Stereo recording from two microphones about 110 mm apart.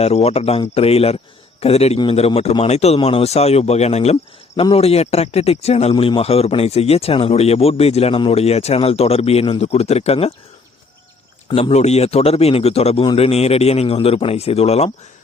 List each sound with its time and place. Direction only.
0.0 s a man's voice: 70° left (ahead or behind)
5.9 s a man's voice: 55° left (ahead or behind)
11.7 s speech: 80° left